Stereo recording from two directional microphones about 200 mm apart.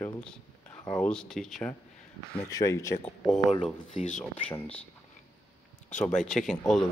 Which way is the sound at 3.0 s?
5° left (ahead or behind).